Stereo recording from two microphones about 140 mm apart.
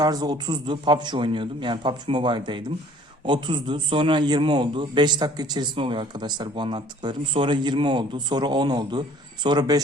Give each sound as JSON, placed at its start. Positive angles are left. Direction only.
{"t": 0.0, "sound": "a man's voice", "side_deg": -30}